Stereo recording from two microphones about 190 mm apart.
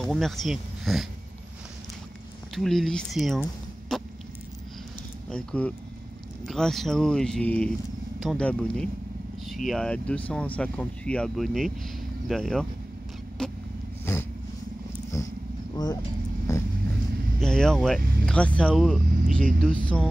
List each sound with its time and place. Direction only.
0.0 s speech: centre (ahead or behind)
2.5 s speech: centre (ahead or behind)
3.9 s a sound: centre (ahead or behind)
5.3 s speech: 5° left (ahead or behind)
13.4 s vehicle: 5° left (ahead or behind)
15.1 s purr: 15° left (ahead or behind)
15.7 s vehicle: 20° left (ahead or behind)
17.4 s vehicle: 5° left (ahead or behind)
18.2 s speech: 5° left (ahead or behind)
19.0 s speech: 45° right (ahead or behind)
19.6 s speech: 5° left (ahead or behind)